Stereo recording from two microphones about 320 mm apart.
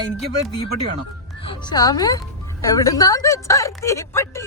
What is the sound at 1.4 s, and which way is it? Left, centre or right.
A woman's voice, centre.